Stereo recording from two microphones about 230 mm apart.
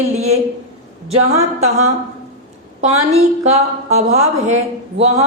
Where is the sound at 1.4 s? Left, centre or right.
Right.